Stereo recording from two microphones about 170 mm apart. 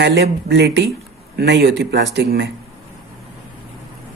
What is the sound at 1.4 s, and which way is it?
Speech, 75° right (ahead or behind).